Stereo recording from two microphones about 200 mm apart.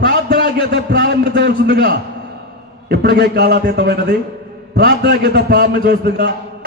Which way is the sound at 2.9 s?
50° right (ahead or behind).